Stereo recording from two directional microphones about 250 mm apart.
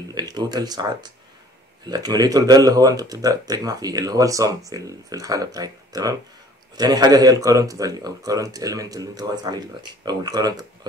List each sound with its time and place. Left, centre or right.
0.1 s speech: centre